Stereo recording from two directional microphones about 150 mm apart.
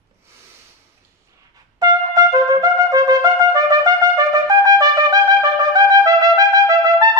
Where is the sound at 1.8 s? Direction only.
25° right (ahead or behind).